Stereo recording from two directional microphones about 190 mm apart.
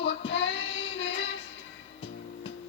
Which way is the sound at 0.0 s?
70° left (ahead or behind).